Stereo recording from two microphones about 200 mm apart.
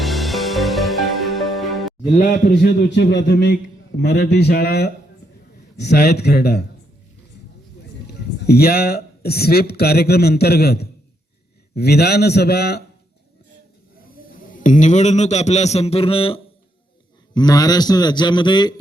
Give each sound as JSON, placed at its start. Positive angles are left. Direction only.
{"t": 0.0, "sound": "music", "side_deg": 0}
{"t": 2.1, "sound": "a man's voice", "side_deg": 40}
{"t": 8.0, "sound": "a man's voice", "side_deg": 50}
{"t": 14.3, "sound": "a man's voice", "side_deg": 40}